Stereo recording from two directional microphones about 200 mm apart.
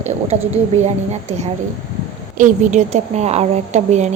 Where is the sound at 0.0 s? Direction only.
35° right (ahead or behind).